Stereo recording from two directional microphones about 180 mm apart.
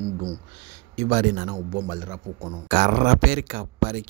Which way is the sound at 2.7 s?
45° right (ahead or behind).